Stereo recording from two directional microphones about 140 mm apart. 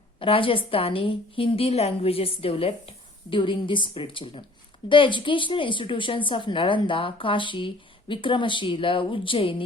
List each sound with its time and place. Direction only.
0.2 s a woman's voice: 40° left (ahead or behind)